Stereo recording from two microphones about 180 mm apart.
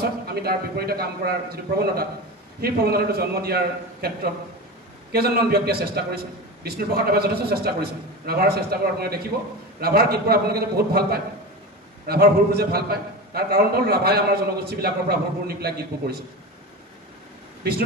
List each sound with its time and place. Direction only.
0.3 s a man's voice: 60° right (ahead or behind)